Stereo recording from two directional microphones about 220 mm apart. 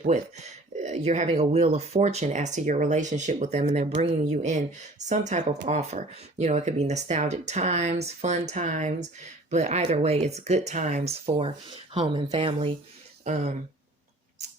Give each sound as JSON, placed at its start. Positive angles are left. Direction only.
{"t": 0.8, "sound": "speech", "side_deg": -30}